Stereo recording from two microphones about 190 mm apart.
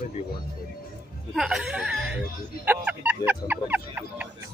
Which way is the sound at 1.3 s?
Centre (ahead or behind).